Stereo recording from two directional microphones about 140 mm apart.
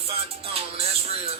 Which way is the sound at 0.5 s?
45° right (ahead or behind).